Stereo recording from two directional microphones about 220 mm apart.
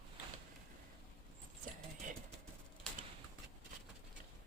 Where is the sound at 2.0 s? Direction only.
35° right (ahead or behind).